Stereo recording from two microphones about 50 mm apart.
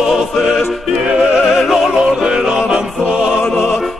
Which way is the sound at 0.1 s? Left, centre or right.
Centre.